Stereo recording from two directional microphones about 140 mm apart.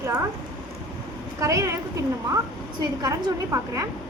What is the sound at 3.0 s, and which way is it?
Speech, 25° right (ahead or behind).